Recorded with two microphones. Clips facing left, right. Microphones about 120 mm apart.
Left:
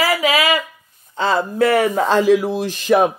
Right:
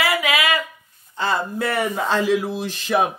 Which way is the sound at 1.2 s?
90° left.